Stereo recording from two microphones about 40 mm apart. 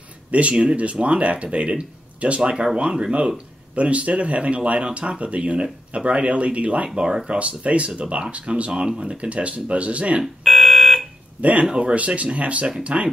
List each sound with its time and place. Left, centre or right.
0.3 s speech: right
2.5 s speech: centre; by 6.9 s right
7.0 s speech: centre
7.2 s speech: right
10.2 s fire alarm: centre
11.7 s speech: right